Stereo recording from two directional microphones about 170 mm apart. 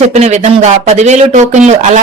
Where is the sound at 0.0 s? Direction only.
40° right (ahead or behind).